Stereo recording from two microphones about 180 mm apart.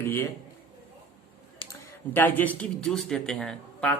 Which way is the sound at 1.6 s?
30° left (ahead or behind).